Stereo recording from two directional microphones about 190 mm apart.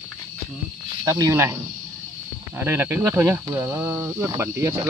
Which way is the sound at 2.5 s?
10° right (ahead or behind).